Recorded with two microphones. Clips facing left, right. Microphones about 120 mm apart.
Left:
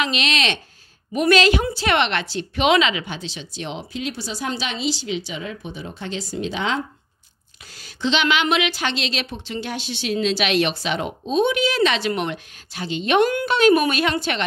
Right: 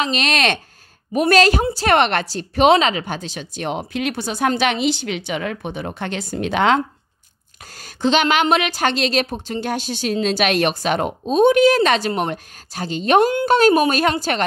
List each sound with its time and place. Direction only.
0.0 s a woman's voice: 45° right (ahead or behind); by 6.8 s 60° right (ahead or behind)
7.6 s a woman's voice: 45° right (ahead or behind)